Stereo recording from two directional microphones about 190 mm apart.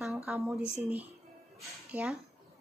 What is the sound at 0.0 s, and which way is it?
Speech, 5° right (ahead or behind).